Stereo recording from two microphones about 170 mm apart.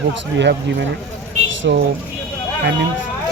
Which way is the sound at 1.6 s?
80° right.